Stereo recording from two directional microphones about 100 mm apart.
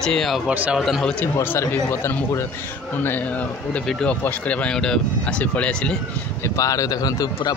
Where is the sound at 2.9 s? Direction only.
20° left (ahead or behind).